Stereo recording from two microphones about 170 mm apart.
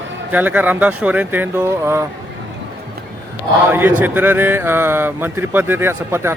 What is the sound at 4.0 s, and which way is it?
Speech, 10° right (ahead or behind).